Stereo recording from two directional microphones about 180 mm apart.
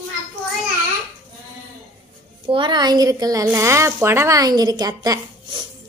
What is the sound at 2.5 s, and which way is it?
Speech, 25° right (ahead or behind).